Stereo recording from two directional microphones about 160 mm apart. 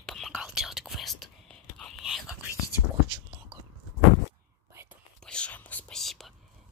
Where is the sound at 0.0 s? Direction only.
Centre (ahead or behind).